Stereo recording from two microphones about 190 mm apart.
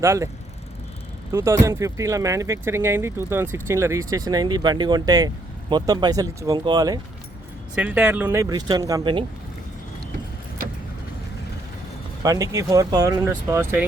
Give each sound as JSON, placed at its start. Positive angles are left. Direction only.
{"t": 0.0, "sound": "speech", "side_deg": -15}
{"t": 1.3, "sound": "speech", "side_deg": -15}
{"t": 7.8, "sound": "speech", "side_deg": -5}
{"t": 12.2, "sound": "speech", "side_deg": -15}